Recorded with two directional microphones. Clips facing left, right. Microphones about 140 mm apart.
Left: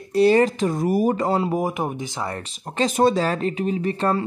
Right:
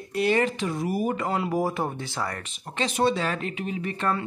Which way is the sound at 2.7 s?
40° left (ahead or behind).